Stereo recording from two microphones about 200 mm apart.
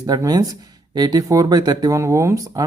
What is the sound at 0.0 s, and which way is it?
Speech, 20° right (ahead or behind).